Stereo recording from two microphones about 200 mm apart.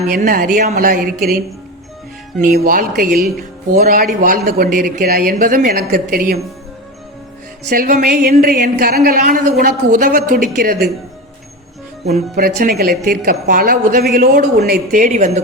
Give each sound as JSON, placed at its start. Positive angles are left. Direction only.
{"t": 0.1, "sound": "speech", "side_deg": -45}
{"t": 2.4, "sound": "speech", "side_deg": -45}
{"t": 7.7, "sound": "speech", "side_deg": -45}
{"t": 12.4, "sound": "speech", "side_deg": -50}